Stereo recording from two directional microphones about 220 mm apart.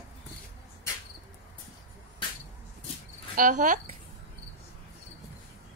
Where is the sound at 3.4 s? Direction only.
35° right (ahead or behind).